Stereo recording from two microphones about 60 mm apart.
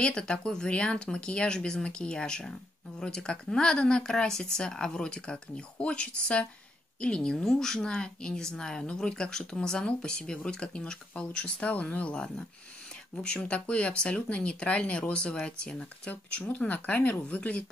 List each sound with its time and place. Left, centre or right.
0.0 s a woman's voice: centre